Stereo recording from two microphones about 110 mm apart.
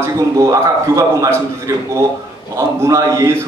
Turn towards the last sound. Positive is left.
turn(degrees=-30)  # may be behind; listen again after turning